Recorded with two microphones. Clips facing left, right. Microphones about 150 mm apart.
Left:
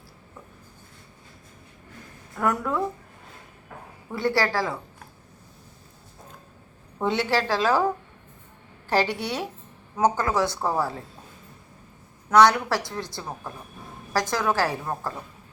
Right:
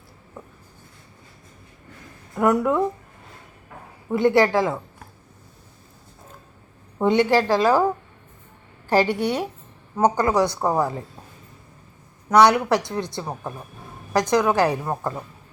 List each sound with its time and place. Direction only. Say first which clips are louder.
2.4 s a woman's voice: right 6 dB; 20° right (ahead or behind)
4.1 s a woman's voice: right 7 dB; 20° right (ahead or behind)
7.0 s a woman's voice: right 6 dB; 15° right (ahead or behind)
8.9 s a woman's voice: right 5 dB; 10° right (ahead or behind)
12.3 s a woman's voice: right 2 dB; 15° right (ahead or behind)